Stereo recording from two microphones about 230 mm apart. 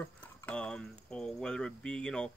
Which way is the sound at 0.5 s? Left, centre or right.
Centre.